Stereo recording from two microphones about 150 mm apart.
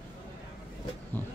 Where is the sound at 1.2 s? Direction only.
15° left (ahead or behind).